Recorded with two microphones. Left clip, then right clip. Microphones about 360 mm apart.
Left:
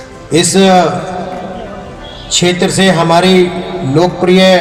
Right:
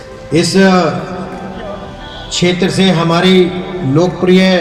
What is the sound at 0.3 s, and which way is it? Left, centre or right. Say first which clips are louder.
Speech: left 1 dB; centre.